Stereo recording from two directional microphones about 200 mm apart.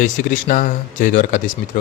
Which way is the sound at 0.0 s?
40° left (ahead or behind).